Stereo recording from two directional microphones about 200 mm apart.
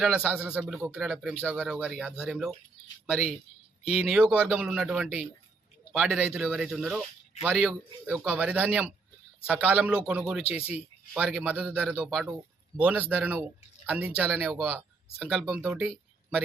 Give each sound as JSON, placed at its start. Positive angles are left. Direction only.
{"t": 0.0, "sound": "a man's voice", "side_deg": -5}
{"t": 3.8, "sound": "a man's voice", "side_deg": -5}
{"t": 10.6, "sound": "speech", "side_deg": 30}
{"t": 11.1, "sound": "a man's voice", "side_deg": -5}